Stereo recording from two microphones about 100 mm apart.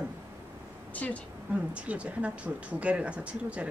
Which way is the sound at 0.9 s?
15° left (ahead or behind).